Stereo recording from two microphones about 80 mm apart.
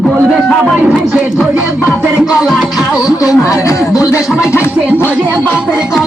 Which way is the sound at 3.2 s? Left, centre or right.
Left.